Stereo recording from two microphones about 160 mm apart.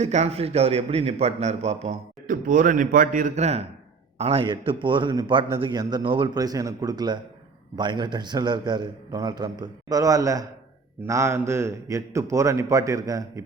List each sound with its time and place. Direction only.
0.0 s a man's voice: 45° right (ahead or behind); by 13.4 s 20° right (ahead or behind)